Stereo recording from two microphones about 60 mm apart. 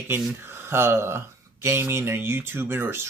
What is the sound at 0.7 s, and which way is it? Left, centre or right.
Speech, right.